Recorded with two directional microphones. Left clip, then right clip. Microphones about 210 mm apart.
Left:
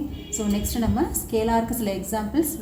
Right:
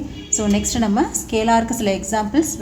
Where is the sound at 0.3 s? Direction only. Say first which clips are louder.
Right 7 dB; 45° right (ahead or behind).